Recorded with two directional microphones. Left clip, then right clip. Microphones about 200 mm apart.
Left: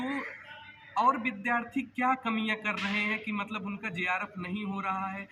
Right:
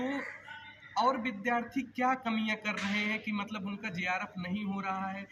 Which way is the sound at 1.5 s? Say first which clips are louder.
Left 1 dB; 25° right (ahead or behind).